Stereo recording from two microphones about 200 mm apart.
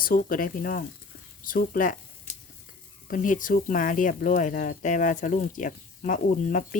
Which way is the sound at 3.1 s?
40° left (ahead or behind).